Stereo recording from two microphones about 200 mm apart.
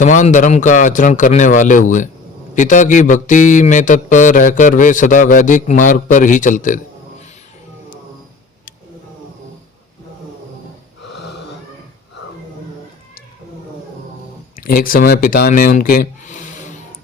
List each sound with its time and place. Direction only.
0.0 s speech: 40° left (ahead or behind)
14.5 s speech: 45° left (ahead or behind)